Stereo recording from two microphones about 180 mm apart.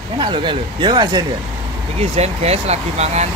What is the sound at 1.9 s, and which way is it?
Speech, 35° right (ahead or behind).